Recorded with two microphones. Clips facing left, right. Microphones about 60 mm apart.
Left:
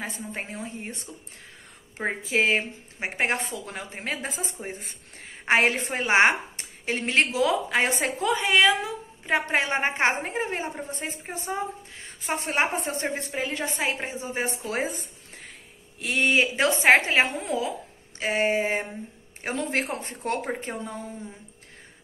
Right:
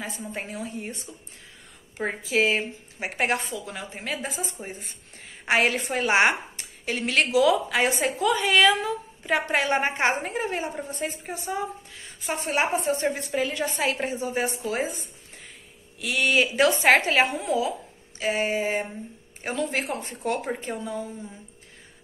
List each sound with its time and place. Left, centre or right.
0.0 s a woman's voice: left
2.0 s a woman's voice: left
3.4 s a woman's voice: left
5.5 s a woman's voice: left
14.7 s speech: left
16.0 s a woman's voice: left